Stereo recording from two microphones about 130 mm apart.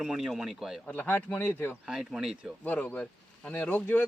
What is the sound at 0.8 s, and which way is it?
Speech, 15° left (ahead or behind).